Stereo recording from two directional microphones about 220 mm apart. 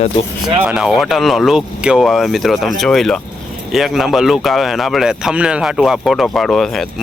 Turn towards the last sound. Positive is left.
turn(degrees=0)  # may be behind; listen again after turning